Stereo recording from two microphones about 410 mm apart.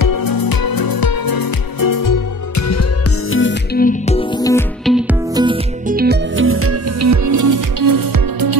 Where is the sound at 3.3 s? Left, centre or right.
Left.